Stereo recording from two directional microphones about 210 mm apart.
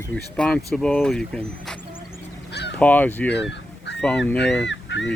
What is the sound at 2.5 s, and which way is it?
Honk, 55° left (ahead or behind).